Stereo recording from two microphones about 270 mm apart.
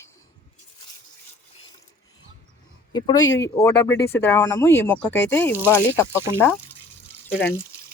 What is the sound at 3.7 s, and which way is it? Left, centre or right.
Speech, left.